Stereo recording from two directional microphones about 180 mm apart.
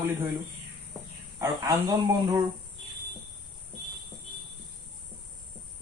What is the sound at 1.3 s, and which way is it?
Speech, 20° right (ahead or behind).